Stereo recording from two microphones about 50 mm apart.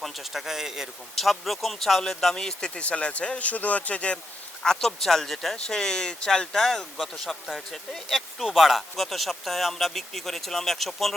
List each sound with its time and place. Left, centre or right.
0.0 s speech: centre
1.1 s speech: centre; by 4.2 s left
4.6 s speech: centre